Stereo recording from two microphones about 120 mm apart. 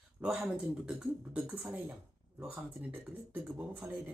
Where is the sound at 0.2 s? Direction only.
10° right (ahead or behind).